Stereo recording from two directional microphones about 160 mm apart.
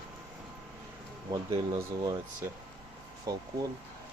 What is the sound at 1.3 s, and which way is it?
Speech, 25° right (ahead or behind).